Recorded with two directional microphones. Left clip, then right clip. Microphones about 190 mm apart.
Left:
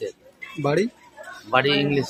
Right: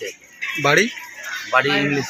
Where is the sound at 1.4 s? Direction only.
30° left (ahead or behind).